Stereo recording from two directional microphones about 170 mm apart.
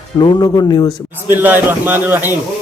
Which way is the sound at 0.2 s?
25° left (ahead or behind).